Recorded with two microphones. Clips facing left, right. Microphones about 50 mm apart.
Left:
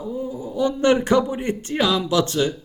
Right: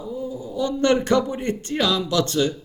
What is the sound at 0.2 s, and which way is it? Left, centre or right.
Speech, left.